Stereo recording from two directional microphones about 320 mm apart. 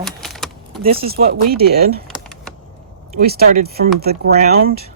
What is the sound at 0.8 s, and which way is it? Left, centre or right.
Speech, right.